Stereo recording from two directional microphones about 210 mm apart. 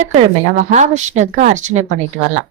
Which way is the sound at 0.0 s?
35° right (ahead or behind).